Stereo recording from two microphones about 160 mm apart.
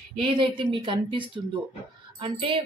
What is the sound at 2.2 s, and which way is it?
Speech, 35° right (ahead or behind).